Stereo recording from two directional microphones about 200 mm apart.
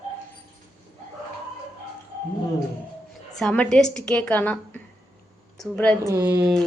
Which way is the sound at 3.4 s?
5° left (ahead or behind).